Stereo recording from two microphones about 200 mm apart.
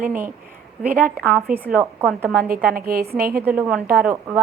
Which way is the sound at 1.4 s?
Centre (ahead or behind).